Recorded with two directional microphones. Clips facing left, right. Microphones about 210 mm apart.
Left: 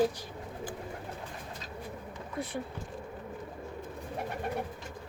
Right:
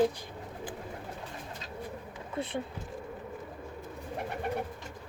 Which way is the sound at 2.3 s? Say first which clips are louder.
Right 2 dB; 25° right (ahead or behind).